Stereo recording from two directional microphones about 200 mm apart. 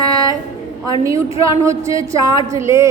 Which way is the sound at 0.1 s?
15° right (ahead or behind).